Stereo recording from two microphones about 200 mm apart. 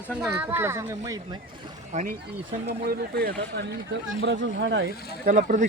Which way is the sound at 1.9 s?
40° right (ahead or behind).